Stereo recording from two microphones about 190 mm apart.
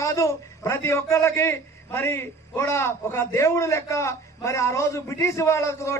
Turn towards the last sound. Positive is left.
turn(degrees=15)  # may be behind; listen again after turning